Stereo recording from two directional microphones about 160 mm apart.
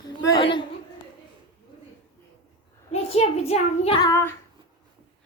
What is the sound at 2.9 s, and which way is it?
Child singing, 40° left (ahead or behind).